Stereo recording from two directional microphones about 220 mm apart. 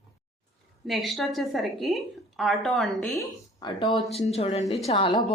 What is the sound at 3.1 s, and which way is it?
Speech, 15° left (ahead or behind).